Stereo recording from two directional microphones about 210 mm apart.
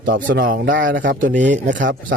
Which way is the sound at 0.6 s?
60° right (ahead or behind).